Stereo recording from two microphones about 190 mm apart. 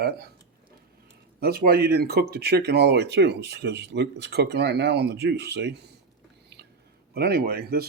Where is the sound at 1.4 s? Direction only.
55° right (ahead or behind).